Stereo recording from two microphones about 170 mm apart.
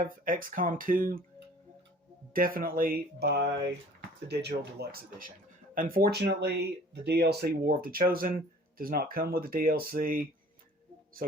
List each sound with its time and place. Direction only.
0.0 s speech: 55° right (ahead or behind)
2.3 s speech: 60° right (ahead or behind)